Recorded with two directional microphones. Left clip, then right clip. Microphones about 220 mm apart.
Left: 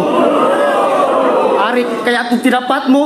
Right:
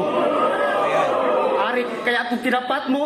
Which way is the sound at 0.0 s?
45° left (ahead or behind).